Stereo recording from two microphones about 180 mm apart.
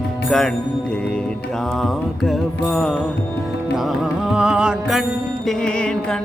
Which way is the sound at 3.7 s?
Centre (ahead or behind).